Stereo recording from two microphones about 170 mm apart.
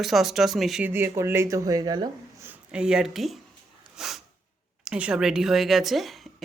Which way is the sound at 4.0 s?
Centre (ahead or behind).